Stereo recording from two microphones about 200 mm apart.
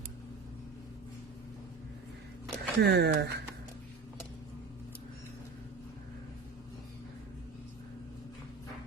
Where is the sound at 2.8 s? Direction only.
55° right (ahead or behind).